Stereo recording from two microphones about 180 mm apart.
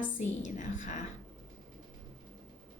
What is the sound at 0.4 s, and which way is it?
Speech, 45° left (ahead or behind).